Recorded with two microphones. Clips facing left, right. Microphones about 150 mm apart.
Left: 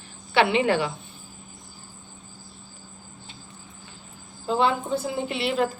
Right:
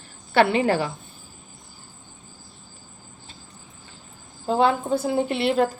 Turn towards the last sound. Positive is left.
turn(degrees=-50)  # may be behind; listen again after turning